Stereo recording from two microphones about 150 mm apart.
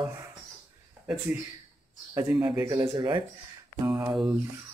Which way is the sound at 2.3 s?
30° right (ahead or behind).